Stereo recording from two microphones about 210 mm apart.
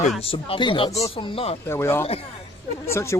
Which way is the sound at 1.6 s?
10° left (ahead or behind).